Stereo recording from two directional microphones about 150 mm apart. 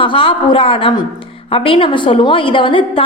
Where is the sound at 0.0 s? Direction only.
35° left (ahead or behind).